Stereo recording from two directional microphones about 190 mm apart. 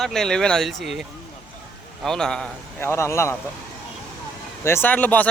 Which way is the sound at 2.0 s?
5° left (ahead or behind).